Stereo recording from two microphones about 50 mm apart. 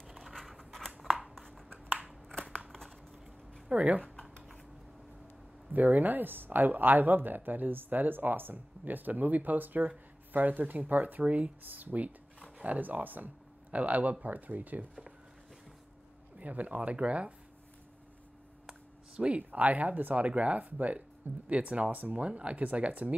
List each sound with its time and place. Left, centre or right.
0.0 s a sound: centre
2.4 s a sound: right
3.6 s speech: right
5.7 s speech: right
16.3 s speech: right
18.7 s speech: right